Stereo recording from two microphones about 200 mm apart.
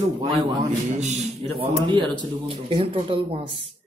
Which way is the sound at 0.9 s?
35° right (ahead or behind).